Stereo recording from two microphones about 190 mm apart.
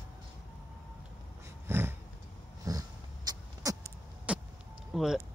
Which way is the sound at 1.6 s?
10° right (ahead or behind).